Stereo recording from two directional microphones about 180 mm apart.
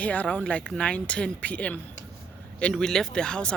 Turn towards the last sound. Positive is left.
turn(degrees=5)  # may be behind; listen again after turning